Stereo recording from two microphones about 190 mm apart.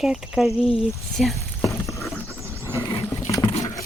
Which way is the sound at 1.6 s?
15° left (ahead or behind).